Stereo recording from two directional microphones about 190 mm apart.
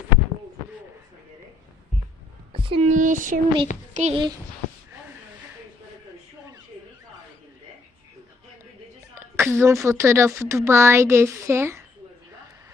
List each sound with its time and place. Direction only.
2.5 s a sound: 30° right (ahead or behind); by 3.4 s 45° right (ahead or behind)
3.9 s a child's voice: 35° right (ahead or behind)
9.1 s a woman's voice: 15° right (ahead or behind)